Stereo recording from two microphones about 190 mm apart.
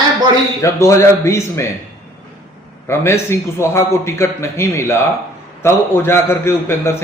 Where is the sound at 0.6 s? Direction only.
15° left (ahead or behind).